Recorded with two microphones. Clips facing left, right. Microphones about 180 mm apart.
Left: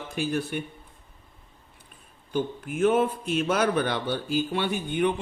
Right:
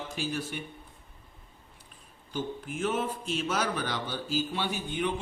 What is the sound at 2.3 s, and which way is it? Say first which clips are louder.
A man's voice: left 6 dB; 55° left (ahead or behind).